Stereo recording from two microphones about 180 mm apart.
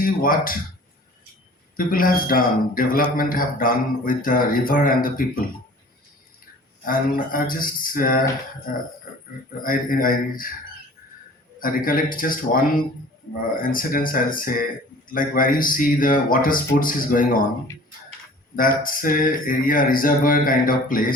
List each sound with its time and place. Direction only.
0.0 s speech: 50° left (ahead or behind)
1.7 s speech: 50° left (ahead or behind)
6.8 s speech: 50° left (ahead or behind)
9.6 s speech: 50° left (ahead or behind)
11.6 s speech: 50° left (ahead or behind)
18.5 s speech: 50° left (ahead or behind)